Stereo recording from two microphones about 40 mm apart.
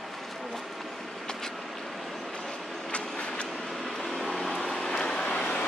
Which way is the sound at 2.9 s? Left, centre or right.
Left.